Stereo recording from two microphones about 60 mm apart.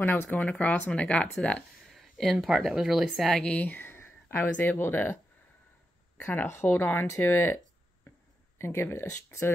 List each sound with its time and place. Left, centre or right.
0.0 s speech: left
1.9 s a sound: centre
2.3 s speech: centre
3.6 s speech: left
6.4 s speech: left